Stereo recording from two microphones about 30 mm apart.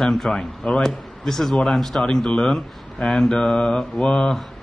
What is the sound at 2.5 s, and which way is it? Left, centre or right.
A man's voice, centre.